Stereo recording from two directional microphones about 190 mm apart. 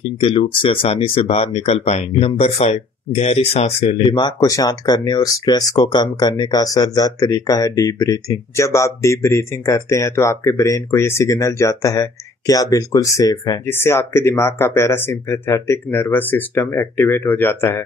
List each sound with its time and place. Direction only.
0.0 s speech: 30° left (ahead or behind)
4.1 s speech: 20° left (ahead or behind)